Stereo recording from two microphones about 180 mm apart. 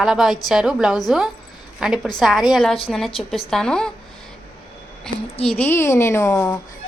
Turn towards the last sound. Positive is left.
turn(degrees=15)  # may be behind; listen again after turning